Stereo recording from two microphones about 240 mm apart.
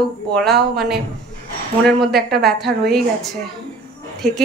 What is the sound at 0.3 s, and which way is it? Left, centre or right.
Speech, centre.